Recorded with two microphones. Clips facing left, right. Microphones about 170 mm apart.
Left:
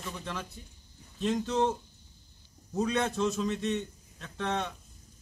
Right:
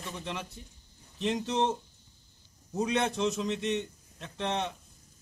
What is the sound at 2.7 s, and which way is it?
Speech, 15° right (ahead or behind).